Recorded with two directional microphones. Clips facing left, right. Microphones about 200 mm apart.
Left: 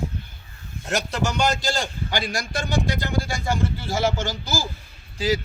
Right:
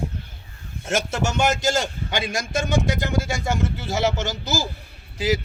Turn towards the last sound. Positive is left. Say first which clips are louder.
# even
turn(degrees=-20)  # may be behind; listen again after turning